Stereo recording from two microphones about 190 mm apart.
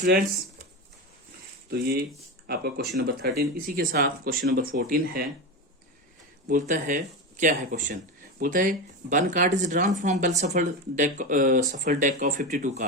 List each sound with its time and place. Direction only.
1.7 s speech: 55° right (ahead or behind)
6.5 s speech: 40° right (ahead or behind)